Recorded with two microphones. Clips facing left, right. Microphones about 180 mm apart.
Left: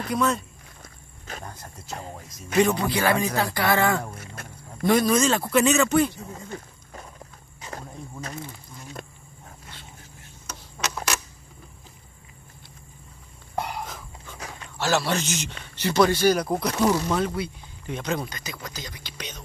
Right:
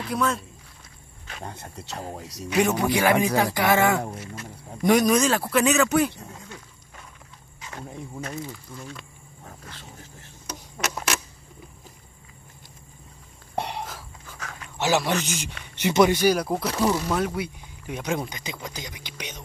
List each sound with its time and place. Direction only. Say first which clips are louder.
0.1 s speech: left 1 dB; centre (ahead or behind)
2.5 s speech: even; 10° right (ahead or behind)
4.2 s music: right 3 dB; 55° left (ahead or behind)
4.8 s speech: right 1 dB; 15° right (ahead or behind)
6.5 s wild animals: left 6 dB; 40° left (ahead or behind)
7.6 s speech: right 1 dB; 35° left (ahead or behind)
14.8 s speech: right 1 dB; 15° right (ahead or behind)
16.3 s speech: left 1 dB; 5° right (ahead or behind)